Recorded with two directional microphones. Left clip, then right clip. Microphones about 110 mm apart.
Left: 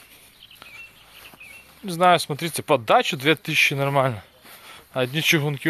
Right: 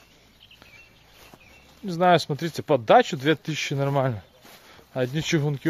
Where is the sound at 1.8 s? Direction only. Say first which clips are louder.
Left 2 dB; 30° right (ahead or behind).